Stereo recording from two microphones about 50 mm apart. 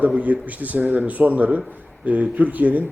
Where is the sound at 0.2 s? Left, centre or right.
Right.